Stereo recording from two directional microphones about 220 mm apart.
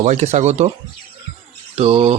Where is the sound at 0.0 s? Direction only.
30° right (ahead or behind).